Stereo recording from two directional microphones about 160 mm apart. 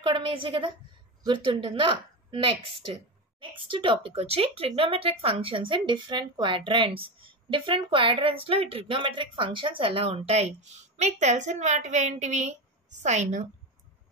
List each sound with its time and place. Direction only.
0.0 s a woman's voice: 30° right (ahead or behind); by 13.5 s 45° right (ahead or behind)